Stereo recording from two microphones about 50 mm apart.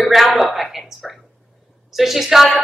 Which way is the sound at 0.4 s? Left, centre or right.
Centre.